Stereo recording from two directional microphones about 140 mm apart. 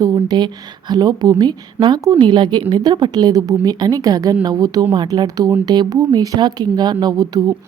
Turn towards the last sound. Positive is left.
turn(degrees=-25)  # may be behind; listen again after turning